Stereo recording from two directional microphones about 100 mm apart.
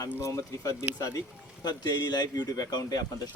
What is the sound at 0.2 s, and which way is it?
Speech, 30° left (ahead or behind).